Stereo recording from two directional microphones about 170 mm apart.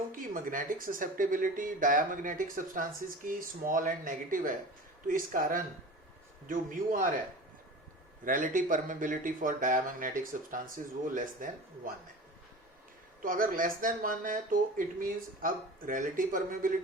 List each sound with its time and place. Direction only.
0.1 s speech: 50° right (ahead or behind)
8.2 s speech: 50° right (ahead or behind)
13.2 s speech: 55° right (ahead or behind)